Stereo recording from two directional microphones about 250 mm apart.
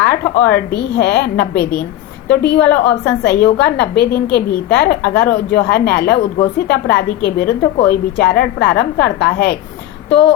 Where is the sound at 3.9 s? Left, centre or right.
Left.